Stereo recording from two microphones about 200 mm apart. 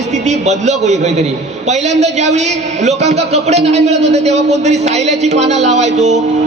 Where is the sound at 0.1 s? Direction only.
35° right (ahead or behind).